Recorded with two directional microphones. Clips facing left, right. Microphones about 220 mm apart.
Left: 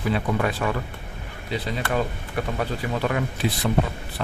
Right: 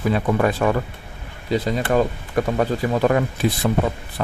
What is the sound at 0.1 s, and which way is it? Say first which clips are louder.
Speech: right 4 dB; 45° right (ahead or behind).